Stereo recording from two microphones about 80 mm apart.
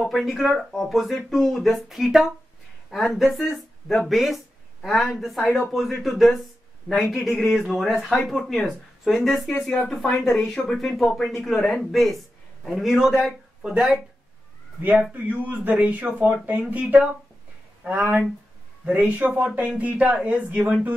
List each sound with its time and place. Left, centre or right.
0.0 s speech: centre
14.8 s speech: centre
17.8 s speech: centre